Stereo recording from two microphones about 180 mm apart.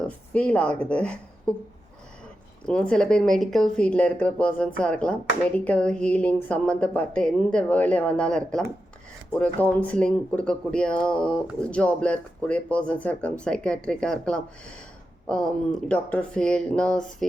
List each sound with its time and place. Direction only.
0.0 s a woman's voice: 5° left (ahead or behind)
2.6 s a woman's voice: 5° left (ahead or behind)